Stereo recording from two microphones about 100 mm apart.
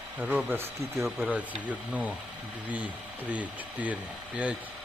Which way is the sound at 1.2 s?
15° right (ahead or behind).